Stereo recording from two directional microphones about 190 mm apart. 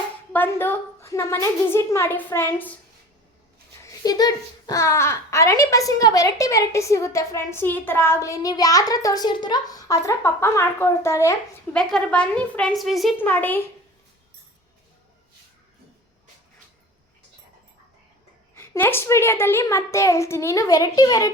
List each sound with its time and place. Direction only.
0.3 s a child's voice: 10° left (ahead or behind)
3.8 s a child's voice: 20° left (ahead or behind)
11.8 s a woman's voice: 5° left (ahead or behind)
18.5 s a child's voice: 15° left (ahead or behind)